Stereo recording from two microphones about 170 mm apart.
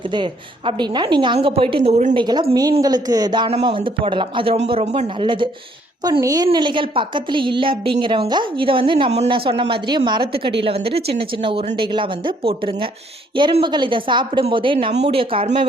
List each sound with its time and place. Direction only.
0.1 s speech: 30° right (ahead or behind)
2.1 s a woman's voice: 25° right (ahead or behind)